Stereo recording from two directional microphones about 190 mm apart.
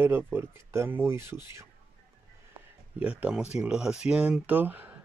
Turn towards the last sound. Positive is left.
turn(degrees=-10)  # may be behind; listen again after turning